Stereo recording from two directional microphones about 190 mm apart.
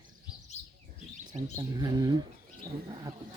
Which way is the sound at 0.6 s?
35° left (ahead or behind).